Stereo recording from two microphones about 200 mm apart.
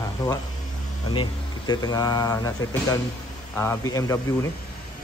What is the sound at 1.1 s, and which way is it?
A man's voice, 20° left (ahead or behind).